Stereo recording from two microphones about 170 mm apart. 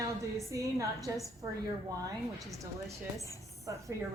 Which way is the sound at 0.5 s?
20° right (ahead or behind).